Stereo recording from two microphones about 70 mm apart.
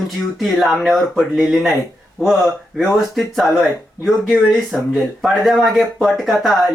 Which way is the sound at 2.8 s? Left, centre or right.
Centre.